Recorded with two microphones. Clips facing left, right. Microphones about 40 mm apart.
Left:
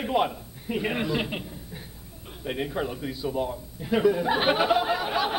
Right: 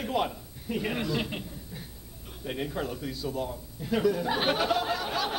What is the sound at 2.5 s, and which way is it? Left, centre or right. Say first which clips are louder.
A man's voice: left 3 dB; centre.